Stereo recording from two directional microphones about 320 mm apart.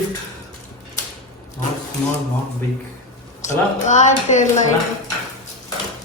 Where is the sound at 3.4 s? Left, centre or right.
Left.